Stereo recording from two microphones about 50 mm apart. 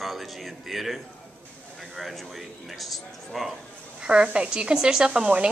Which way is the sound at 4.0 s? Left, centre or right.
Centre.